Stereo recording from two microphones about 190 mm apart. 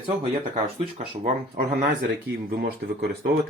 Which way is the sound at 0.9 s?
45° right (ahead or behind).